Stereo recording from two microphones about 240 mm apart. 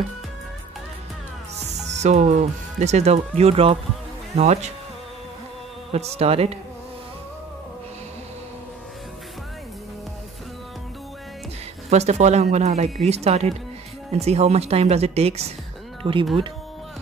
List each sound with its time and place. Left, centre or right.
1.9 s speech: right
5.9 s speech: right
11.9 s speech: right